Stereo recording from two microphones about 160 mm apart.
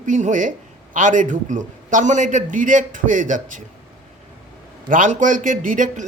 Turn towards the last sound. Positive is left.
turn(degrees=-55)  # may be behind; listen again after turning